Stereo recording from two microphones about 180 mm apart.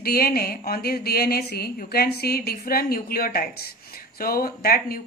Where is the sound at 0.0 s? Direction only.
55° left (ahead or behind).